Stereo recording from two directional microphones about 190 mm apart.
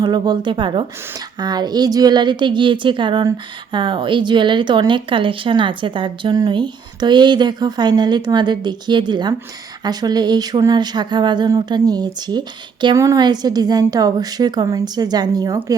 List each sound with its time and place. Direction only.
0.0 s speech: 20° right (ahead or behind)